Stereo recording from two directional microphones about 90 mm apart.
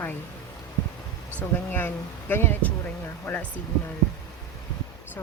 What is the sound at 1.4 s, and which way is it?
Speech, 20° left (ahead or behind).